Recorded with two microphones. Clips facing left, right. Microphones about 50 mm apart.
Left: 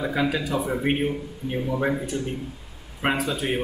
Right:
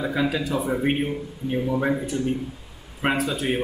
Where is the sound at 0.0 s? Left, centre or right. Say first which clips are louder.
Even; centre.